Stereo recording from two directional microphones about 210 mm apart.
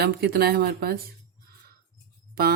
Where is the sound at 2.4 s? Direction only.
45° right (ahead or behind).